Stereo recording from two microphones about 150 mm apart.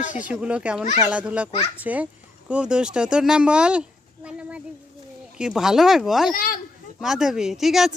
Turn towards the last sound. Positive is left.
turn(degrees=0)  # may be behind; listen again after turning